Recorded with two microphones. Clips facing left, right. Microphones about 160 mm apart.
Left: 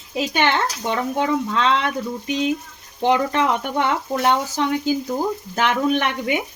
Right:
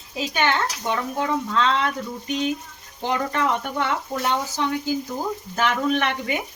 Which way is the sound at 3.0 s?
65° left (ahead or behind).